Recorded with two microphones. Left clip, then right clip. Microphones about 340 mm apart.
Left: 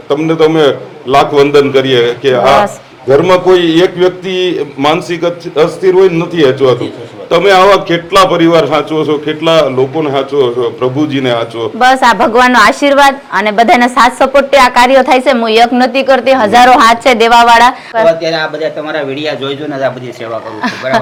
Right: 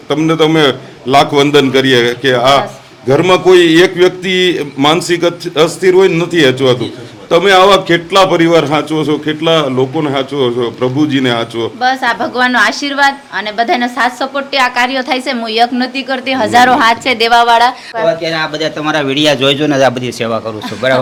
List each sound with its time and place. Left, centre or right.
0.1 s a man's voice: right
11.8 s a woman's voice: centre